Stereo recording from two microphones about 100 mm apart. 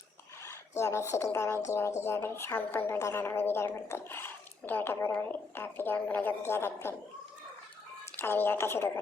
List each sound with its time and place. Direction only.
0.4 s speech: 30° left (ahead or behind)
8.1 s a woman's voice: 25° left (ahead or behind)